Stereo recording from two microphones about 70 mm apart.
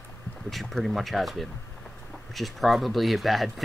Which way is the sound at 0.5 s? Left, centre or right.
Centre.